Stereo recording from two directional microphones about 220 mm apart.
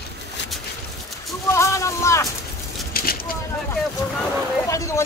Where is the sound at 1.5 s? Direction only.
15° left (ahead or behind).